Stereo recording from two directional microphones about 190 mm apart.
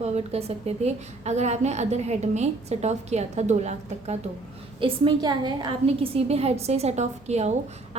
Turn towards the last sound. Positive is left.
turn(degrees=-35)  # may be behind; listen again after turning